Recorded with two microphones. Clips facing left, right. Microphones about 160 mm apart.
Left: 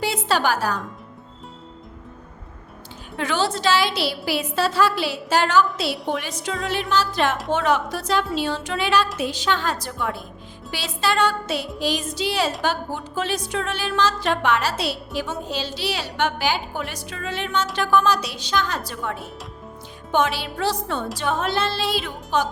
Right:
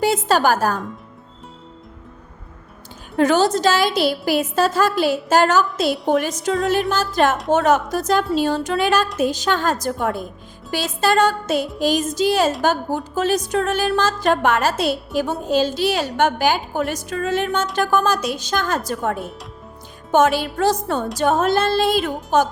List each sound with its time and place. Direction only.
0.0 s music: 45° right (ahead or behind)
3.2 s speech: 45° right (ahead or behind)